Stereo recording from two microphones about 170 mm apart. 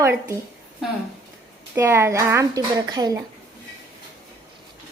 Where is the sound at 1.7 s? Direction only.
15° right (ahead or behind).